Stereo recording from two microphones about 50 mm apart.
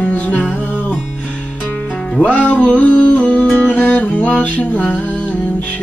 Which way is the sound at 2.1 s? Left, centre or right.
Left.